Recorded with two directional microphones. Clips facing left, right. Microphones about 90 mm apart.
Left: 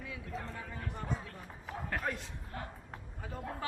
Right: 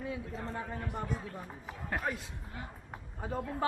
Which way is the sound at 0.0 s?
35° right (ahead or behind).